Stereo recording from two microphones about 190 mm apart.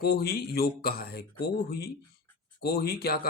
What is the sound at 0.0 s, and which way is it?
Speech, 55° left (ahead or behind).